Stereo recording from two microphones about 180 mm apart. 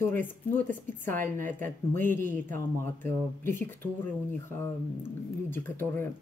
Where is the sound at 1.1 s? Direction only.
50° right (ahead or behind).